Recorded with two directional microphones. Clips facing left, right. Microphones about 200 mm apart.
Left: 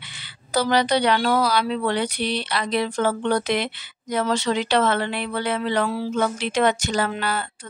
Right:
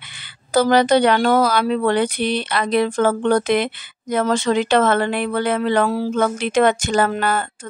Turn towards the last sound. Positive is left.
turn(degrees=-50)  # may be behind; listen again after turning